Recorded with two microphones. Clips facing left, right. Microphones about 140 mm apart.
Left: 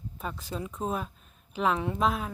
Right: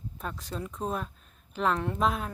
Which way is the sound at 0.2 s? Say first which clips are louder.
Left 1 dB; centre (ahead or behind).